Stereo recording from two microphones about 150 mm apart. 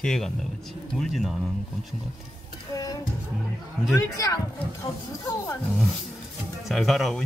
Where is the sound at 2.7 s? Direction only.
25° left (ahead or behind).